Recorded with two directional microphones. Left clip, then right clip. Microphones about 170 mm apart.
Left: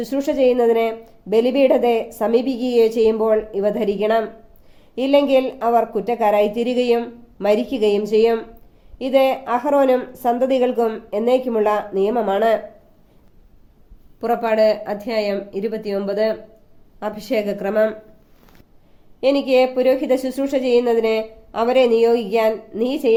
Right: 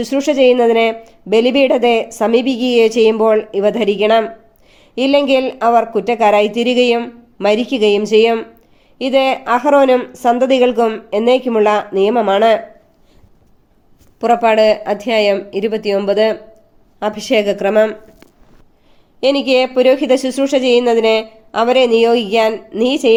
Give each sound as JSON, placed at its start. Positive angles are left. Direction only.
{"t": 0.0, "sound": "speech", "side_deg": -40}
{"t": 14.2, "sound": "a woman's voice", "side_deg": -45}
{"t": 19.2, "sound": "a woman's voice", "side_deg": -40}